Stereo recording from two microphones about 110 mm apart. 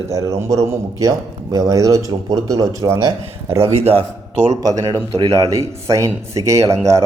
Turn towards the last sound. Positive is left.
turn(degrees=-30)  # may be behind; listen again after turning